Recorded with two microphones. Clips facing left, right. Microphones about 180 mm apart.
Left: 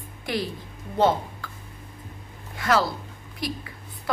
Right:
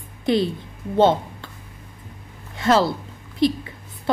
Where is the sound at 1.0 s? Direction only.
25° right (ahead or behind).